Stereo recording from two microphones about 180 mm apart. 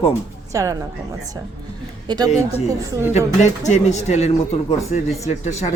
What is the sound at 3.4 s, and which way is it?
Speech, 40° left (ahead or behind).